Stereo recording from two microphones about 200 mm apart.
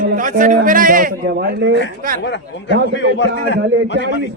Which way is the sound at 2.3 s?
60° left (ahead or behind).